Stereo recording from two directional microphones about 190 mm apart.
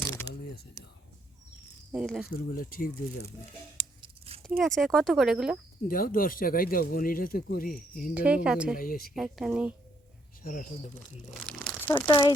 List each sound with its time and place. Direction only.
1.9 s speech: centre (ahead or behind)
2.2 s speech: 50° left (ahead or behind)
4.6 s speech: centre (ahead or behind)
5.9 s speech: 50° left (ahead or behind)
8.1 s speech: 5° right (ahead or behind)
8.8 s speech: 50° left (ahead or behind)
9.1 s speech: centre (ahead or behind)
10.4 s speech: 50° left (ahead or behind)
11.4 s crumpling: 5° left (ahead or behind)
12.0 s speech: 20° left (ahead or behind)